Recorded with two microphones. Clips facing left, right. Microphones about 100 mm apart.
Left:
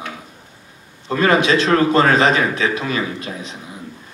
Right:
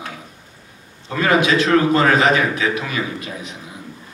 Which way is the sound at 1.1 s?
30° left (ahead or behind).